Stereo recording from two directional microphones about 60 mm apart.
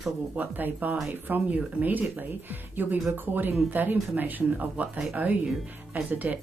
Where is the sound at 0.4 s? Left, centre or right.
Right.